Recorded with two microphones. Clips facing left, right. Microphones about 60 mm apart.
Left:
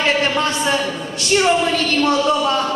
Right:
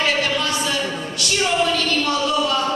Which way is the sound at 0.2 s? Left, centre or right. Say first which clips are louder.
Left 3 dB; left.